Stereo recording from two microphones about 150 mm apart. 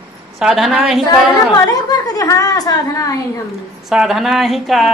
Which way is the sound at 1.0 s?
30° left (ahead or behind).